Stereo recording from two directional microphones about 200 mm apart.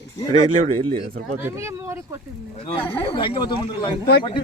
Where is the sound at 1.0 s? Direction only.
50° right (ahead or behind).